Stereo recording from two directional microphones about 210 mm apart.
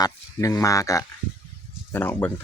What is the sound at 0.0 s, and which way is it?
Speech, 15° left (ahead or behind).